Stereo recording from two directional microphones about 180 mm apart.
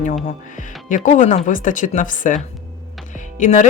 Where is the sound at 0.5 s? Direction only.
45° left (ahead or behind).